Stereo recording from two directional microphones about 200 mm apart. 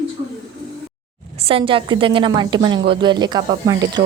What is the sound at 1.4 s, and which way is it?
A woman's voice, 30° right (ahead or behind).